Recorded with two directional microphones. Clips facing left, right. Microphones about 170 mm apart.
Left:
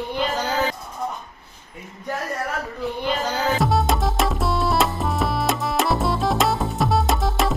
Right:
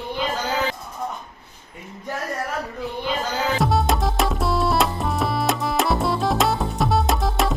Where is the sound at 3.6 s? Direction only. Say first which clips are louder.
Right 2 dB; centre (ahead or behind).